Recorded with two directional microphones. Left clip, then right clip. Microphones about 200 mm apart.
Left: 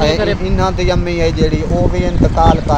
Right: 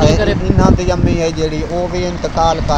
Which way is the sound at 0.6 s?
20° left (ahead or behind).